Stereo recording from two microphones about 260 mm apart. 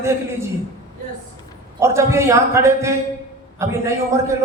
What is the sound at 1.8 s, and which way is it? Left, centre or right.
A man's voice, centre.